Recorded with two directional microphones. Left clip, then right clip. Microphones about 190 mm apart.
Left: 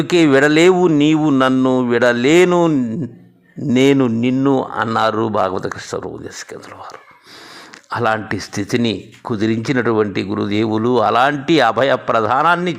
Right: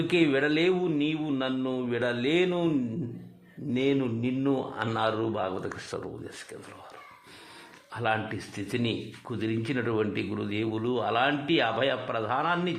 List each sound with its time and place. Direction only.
0.1 s speech: 40° left (ahead or behind)
3.7 s speech: 45° left (ahead or behind); by 6.6 s 30° left (ahead or behind)
7.9 s speech: 45° left (ahead or behind)